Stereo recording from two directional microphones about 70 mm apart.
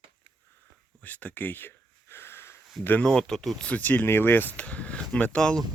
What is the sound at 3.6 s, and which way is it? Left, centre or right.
Speech, left.